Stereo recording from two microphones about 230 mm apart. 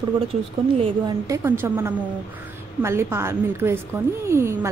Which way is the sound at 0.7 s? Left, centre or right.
Right.